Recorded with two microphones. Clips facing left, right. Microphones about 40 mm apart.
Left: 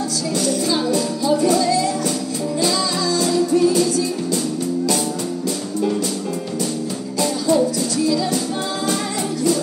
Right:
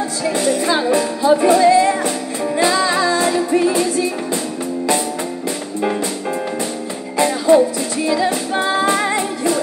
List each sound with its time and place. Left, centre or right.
0.4 s music: right
7.2 s music: right